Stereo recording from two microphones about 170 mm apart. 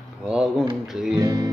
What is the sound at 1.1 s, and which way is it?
Music, 25° right (ahead or behind).